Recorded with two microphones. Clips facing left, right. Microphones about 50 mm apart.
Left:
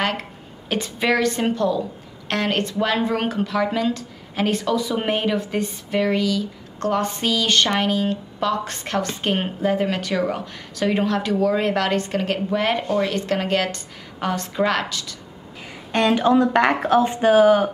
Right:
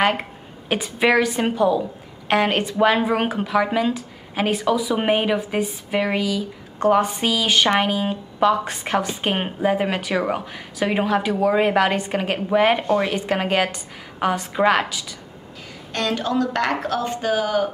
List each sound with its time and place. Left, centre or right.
0.0 s a woman's voice: centre
15.9 s speech: left